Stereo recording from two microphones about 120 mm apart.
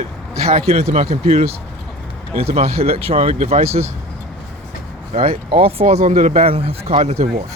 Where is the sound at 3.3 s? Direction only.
65° right (ahead or behind).